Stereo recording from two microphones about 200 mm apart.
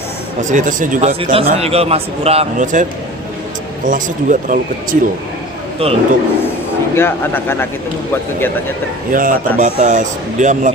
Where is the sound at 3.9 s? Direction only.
40° right (ahead or behind).